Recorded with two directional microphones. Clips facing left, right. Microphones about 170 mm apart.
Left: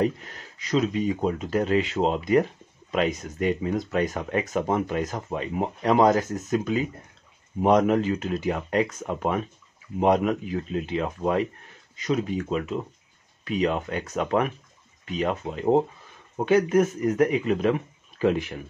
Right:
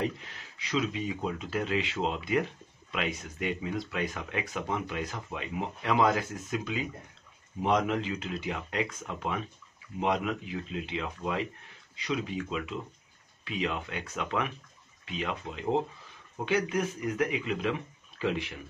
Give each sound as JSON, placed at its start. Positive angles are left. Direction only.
{"t": 0.0, "sound": "speech", "side_deg": 45}